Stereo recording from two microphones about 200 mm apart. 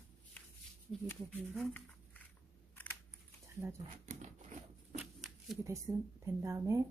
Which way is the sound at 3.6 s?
10° right (ahead or behind).